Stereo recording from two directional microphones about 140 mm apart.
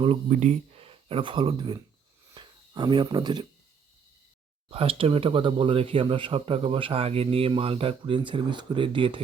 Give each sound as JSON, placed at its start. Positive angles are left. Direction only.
{"t": 0.3, "sound": "speech", "side_deg": -60}
{"t": 2.3, "sound": "a sound", "side_deg": -35}
{"t": 4.7, "sound": "speech", "side_deg": -45}